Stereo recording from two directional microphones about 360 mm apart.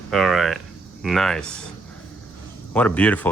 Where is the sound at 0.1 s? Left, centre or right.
Centre.